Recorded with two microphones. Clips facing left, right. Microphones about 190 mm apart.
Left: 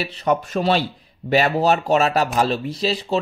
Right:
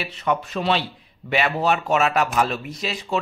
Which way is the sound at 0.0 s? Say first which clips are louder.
Left 3 dB; 35° left (ahead or behind).